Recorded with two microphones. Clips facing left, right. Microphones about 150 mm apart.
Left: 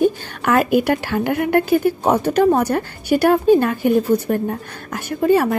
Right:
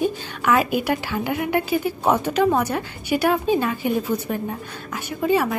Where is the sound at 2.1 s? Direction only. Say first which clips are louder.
Left 3 dB; 40° left (ahead or behind).